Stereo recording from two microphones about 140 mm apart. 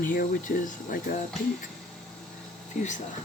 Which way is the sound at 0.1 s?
80° left.